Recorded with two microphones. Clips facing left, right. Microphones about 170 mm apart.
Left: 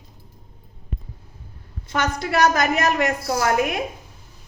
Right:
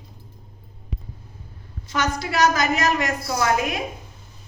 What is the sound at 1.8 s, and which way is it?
A woman's voice, 55° left (ahead or behind).